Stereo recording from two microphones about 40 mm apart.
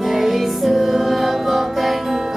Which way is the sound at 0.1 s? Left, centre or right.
Centre.